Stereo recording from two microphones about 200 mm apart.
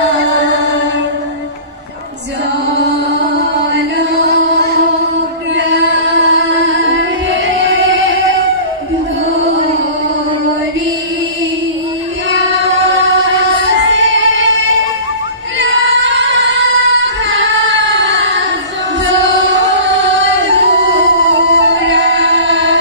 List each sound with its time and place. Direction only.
4.3 s music: 55° right (ahead or behind)
6.2 s music: 70° right (ahead or behind)
12.3 s music: 65° right (ahead or behind)
15.6 s singing: 65° right (ahead or behind)
19.0 s music: 65° right (ahead or behind)